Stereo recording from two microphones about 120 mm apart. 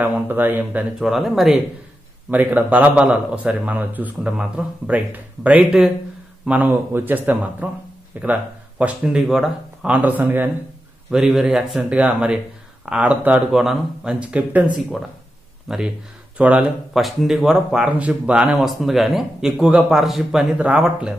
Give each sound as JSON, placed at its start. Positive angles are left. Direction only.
{"t": 0.0, "sound": "a man's voice", "side_deg": -15}
{"t": 1.0, "sound": "speech", "side_deg": 0}
{"t": 2.3, "sound": "a man's voice", "side_deg": -15}
{"t": 11.1, "sound": "a man's voice", "side_deg": -5}
{"t": 17.0, "sound": "speech", "side_deg": 0}